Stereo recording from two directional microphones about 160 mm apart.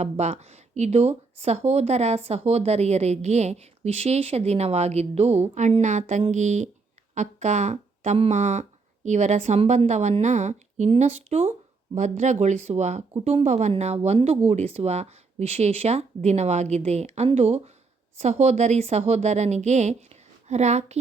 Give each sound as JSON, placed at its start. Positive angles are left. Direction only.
{"t": 0.0, "sound": "speech", "side_deg": -45}